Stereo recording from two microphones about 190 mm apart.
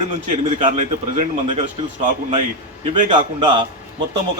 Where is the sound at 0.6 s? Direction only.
35° right (ahead or behind).